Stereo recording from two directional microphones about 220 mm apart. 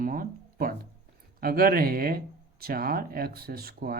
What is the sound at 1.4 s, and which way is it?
Speech, 40° right (ahead or behind).